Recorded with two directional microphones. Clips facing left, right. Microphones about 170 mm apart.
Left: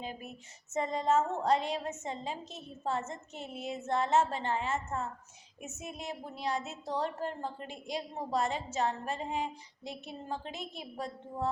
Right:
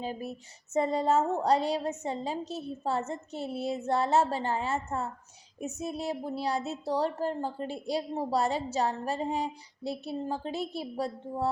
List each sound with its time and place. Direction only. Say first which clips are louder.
0.0 s a woman's voice: right 7 dB; 35° right (ahead or behind)